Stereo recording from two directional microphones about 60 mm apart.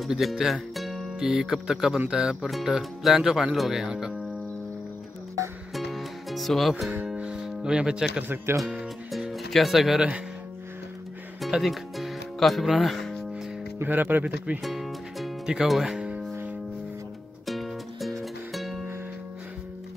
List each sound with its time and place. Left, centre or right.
0.1 s speech: centre
5.8 s music: centre
7.4 s speech: centre
8.2 s speech: right
9.3 s speech: centre
11.4 s music: centre
13.8 s speech: right
14.6 s music: centre
15.5 s speech: centre
17.5 s music: centre